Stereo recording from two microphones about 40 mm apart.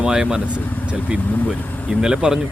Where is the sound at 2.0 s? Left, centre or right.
Centre.